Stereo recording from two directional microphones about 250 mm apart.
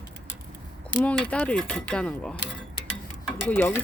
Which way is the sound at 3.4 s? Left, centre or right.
Centre.